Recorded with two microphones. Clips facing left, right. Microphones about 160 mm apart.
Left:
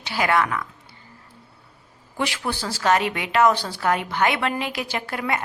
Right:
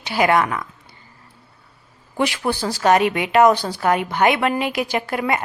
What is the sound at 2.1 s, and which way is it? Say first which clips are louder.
A woman's voice: right 5 dB; 15° right (ahead or behind).